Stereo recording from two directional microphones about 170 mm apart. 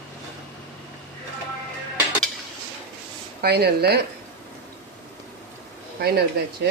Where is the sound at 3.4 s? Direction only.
70° right (ahead or behind).